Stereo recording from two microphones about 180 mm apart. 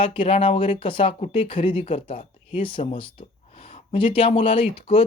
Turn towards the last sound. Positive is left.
turn(degrees=30)  # may be behind; listen again after turning